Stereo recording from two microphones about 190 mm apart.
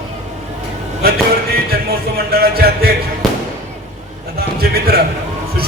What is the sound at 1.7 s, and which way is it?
Music, 55° right (ahead or behind).